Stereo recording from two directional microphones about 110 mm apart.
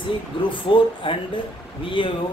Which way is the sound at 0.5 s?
50° left (ahead or behind).